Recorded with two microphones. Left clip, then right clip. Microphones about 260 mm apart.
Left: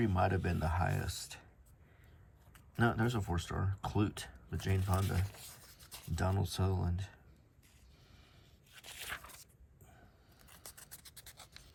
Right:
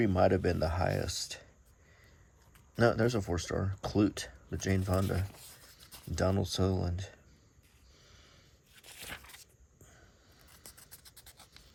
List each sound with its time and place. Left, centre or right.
0.0 s speech: right
2.7 s speech: right
5.1 s writing: centre
6.1 s speech: right
8.7 s a sound: centre
10.5 s scratch: centre